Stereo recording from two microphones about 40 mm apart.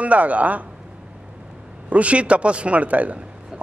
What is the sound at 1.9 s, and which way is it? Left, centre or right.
A man's voice, right.